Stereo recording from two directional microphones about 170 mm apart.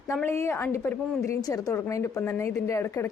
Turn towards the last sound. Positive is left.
turn(degrees=15)  # may be behind; listen again after turning